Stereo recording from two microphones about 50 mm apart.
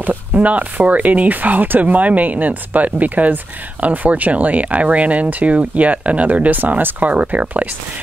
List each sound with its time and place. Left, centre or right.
0.0 s speech: right